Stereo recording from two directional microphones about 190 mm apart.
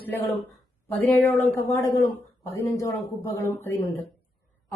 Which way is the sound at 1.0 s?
10° left (ahead or behind).